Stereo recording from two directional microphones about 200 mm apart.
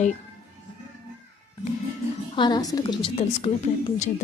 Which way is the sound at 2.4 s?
20° left (ahead or behind).